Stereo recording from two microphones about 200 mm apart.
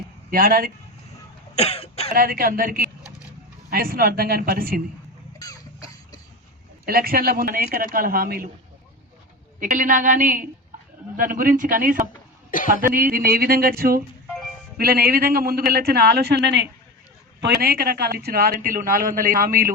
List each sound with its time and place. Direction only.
0.3 s speech: 45° right (ahead or behind)
1.5 s cough: 30° left (ahead or behind)
2.1 s speech: 45° right (ahead or behind)
5.4 s cough: 15° left (ahead or behind)
6.8 s speech: 45° right (ahead or behind)
9.6 s a woman's voice: 40° right (ahead or behind)
12.5 s cough: 45° left (ahead or behind)
12.8 s speech: 45° right (ahead or behind)